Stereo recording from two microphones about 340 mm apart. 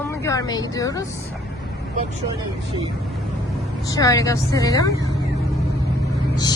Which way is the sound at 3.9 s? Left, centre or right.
Centre.